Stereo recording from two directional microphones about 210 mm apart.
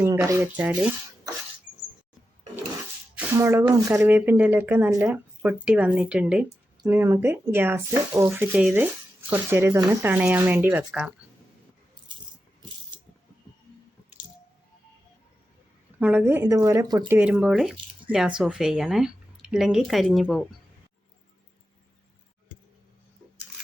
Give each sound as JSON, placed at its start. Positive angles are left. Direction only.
{"t": 0.0, "sound": "speech", "side_deg": -15}
{"t": 3.2, "sound": "speech", "side_deg": -10}
{"t": 16.0, "sound": "speech", "side_deg": -10}
{"t": 17.2, "sound": "speech", "side_deg": -5}